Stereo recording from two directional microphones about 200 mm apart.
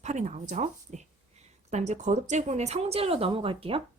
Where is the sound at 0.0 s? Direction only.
35° right (ahead or behind).